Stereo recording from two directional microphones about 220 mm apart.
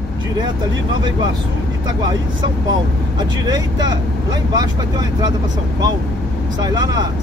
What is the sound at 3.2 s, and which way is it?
Speech, 20° right (ahead or behind).